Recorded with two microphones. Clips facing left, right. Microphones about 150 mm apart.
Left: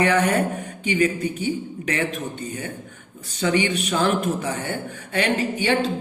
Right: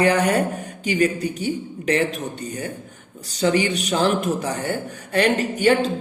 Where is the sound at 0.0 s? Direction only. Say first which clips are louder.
Right 1 dB; 35° right (ahead or behind).